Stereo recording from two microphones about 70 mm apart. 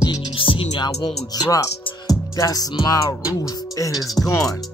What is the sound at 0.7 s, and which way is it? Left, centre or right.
Speech, left.